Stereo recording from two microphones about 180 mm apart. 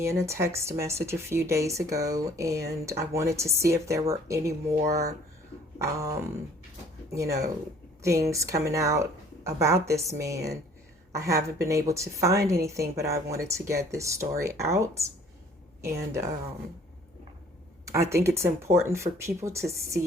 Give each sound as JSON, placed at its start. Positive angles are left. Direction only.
{"t": 0.0, "sound": "speech", "side_deg": -15}
{"t": 5.8, "sound": "speech", "side_deg": -15}
{"t": 8.0, "sound": "a woman's voice", "side_deg": -15}
{"t": 17.8, "sound": "speech", "side_deg": -15}